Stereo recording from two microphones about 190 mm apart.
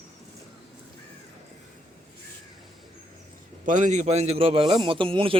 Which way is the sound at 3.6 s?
40° right (ahead or behind).